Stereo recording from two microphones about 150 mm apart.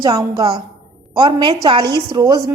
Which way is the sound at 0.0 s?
25° right (ahead or behind).